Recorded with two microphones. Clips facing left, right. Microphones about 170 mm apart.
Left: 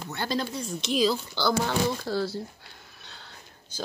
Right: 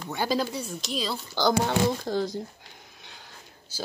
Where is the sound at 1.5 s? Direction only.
20° right (ahead or behind).